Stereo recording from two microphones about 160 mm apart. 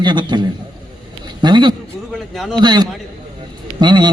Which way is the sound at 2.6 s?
25° right (ahead or behind).